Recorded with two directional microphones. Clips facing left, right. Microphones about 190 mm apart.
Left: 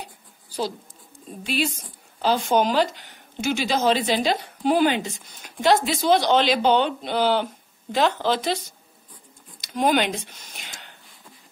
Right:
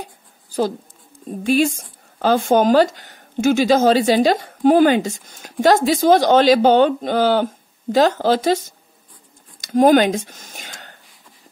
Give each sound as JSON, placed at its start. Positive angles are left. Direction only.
{"t": 1.4, "sound": "speech", "side_deg": -45}